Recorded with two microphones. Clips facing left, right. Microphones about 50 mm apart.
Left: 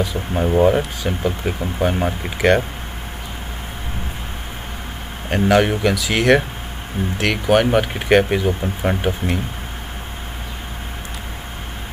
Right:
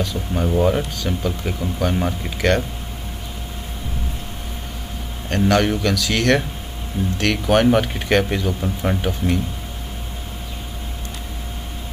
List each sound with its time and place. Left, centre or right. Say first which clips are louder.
0.0 s speech: left 2 dB; left
5.3 s speech: left 2 dB; centre